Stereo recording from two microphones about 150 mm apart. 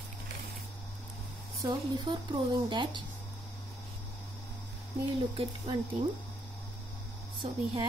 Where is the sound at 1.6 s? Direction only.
30° right (ahead or behind).